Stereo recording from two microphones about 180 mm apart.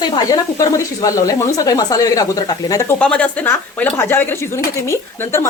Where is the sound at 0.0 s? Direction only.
20° left (ahead or behind).